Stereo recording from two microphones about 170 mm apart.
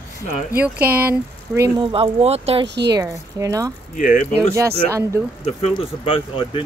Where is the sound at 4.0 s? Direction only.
50° left (ahead or behind).